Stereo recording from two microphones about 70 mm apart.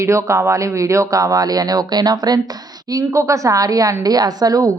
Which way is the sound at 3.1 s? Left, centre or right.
Right.